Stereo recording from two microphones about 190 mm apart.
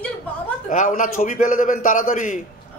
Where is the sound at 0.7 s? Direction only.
45° left (ahead or behind).